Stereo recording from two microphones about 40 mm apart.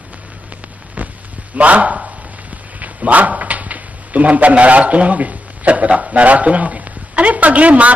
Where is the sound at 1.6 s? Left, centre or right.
Right.